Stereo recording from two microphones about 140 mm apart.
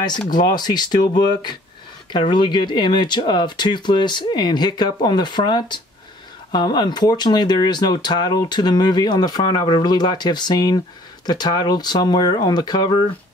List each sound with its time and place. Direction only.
0.3 s speech: 30° left (ahead or behind)